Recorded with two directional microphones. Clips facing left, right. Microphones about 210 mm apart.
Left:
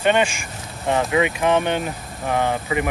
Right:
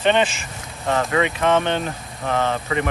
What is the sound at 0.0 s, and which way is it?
Speech, 10° left (ahead or behind).